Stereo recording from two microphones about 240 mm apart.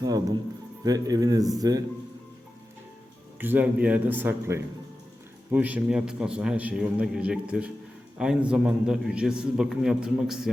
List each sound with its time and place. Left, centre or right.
0.0 s a man's voice: centre
3.3 s a man's voice: centre